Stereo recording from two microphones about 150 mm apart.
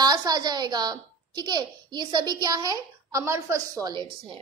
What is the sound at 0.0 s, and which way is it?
A child's voice, 25° right (ahead or behind).